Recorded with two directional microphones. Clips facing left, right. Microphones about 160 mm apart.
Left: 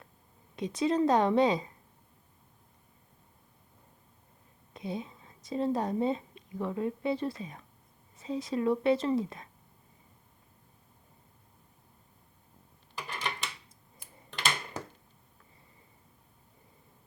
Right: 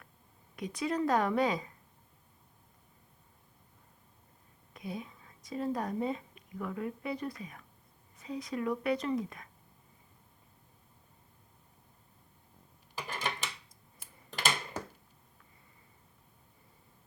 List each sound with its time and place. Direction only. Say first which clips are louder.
0.5 s a woman's voice: left 5 dB; 25° left (ahead or behind)
4.7 s a woman's voice: left 4 dB; 25° left (ahead or behind)
13.0 s a sound: even; 45° right (ahead or behind)